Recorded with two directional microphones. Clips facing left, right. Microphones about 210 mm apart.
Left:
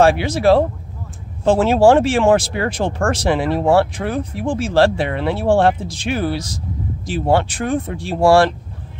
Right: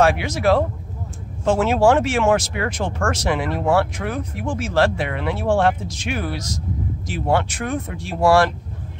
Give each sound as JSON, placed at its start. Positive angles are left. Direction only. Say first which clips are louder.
{"t": 0.0, "sound": "speech", "louder": "left 4 dB", "side_deg": 30}